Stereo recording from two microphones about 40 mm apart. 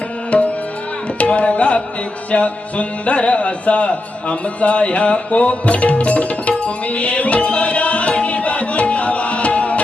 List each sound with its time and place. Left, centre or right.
0.3 s tabla: left
1.2 s speech: left
6.8 s music: left